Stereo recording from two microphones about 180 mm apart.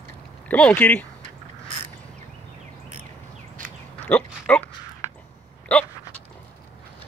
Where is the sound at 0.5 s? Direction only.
10° left (ahead or behind).